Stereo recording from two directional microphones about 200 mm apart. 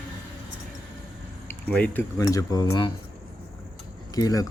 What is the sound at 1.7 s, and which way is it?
Speech, 10° left (ahead or behind).